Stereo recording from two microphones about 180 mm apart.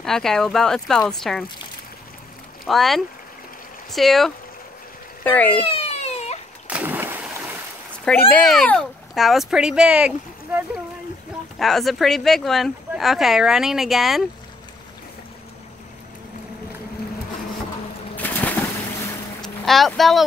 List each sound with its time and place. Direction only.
0.0 s speech: 5° left (ahead or behind)
2.6 s speech: centre (ahead or behind)
5.7 s a sound: 35° left (ahead or behind)
6.7 s splash: 10° right (ahead or behind)
8.0 s speech: 10° left (ahead or behind)
11.5 s speech: centre (ahead or behind)
18.1 s boat: 10° left (ahead or behind)
19.4 s speech: centre (ahead or behind)